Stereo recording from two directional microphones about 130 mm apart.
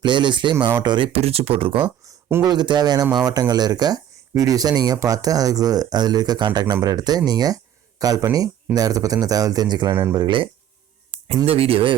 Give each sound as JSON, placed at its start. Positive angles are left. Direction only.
{"t": 0.0, "sound": "speech", "side_deg": -35}
{"t": 2.0, "sound": "speech", "side_deg": -30}
{"t": 9.9, "sound": "speech", "side_deg": -20}
{"t": 10.2, "sound": "speech", "side_deg": -40}